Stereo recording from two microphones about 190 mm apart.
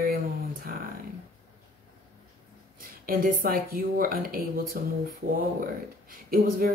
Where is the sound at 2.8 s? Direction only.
50° right (ahead or behind).